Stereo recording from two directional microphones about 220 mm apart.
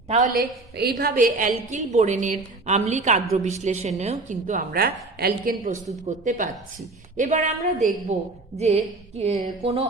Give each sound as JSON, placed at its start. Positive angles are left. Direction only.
{"t": 0.1, "sound": "a woman's voice", "side_deg": -35}